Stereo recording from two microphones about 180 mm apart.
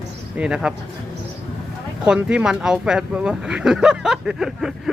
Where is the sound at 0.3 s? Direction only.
5° right (ahead or behind).